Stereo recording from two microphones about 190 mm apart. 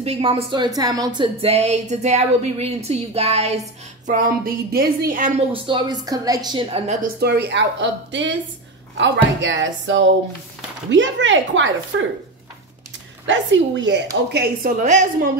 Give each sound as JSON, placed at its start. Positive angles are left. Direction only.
{"t": 0.0, "sound": "a woman's voice", "side_deg": -30}
{"t": 4.1, "sound": "speech", "side_deg": -50}
{"t": 5.5, "sound": "a woman's voice", "side_deg": -25}
{"t": 7.2, "sound": "a woman's voice", "side_deg": -60}
{"t": 13.3, "sound": "a woman's voice", "side_deg": -75}
{"t": 14.3, "sound": "a woman's voice", "side_deg": -60}
{"t": 14.8, "sound": "a woman's voice", "side_deg": -40}